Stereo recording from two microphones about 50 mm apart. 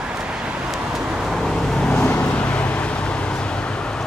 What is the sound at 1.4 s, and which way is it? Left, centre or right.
Vehicle, centre.